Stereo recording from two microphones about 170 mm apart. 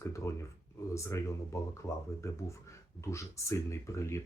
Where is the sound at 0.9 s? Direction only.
15° left (ahead or behind).